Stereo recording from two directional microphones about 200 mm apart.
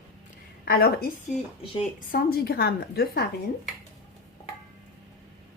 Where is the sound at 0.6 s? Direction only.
50° left (ahead or behind).